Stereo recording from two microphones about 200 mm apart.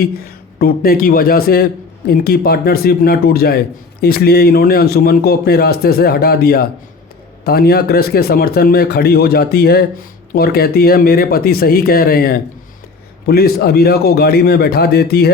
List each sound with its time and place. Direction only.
0.6 s speech: 45° left (ahead or behind)